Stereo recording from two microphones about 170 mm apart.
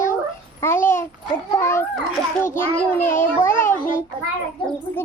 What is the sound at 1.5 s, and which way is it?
Music, 15° left (ahead or behind).